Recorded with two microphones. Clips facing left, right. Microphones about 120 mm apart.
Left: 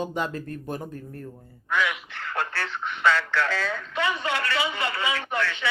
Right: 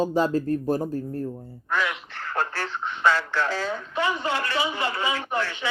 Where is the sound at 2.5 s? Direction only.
20° right (ahead or behind).